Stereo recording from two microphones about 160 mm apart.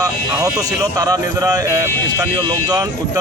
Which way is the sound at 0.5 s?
20° right (ahead or behind).